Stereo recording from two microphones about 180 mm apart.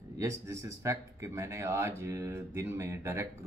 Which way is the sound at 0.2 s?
15° right (ahead or behind).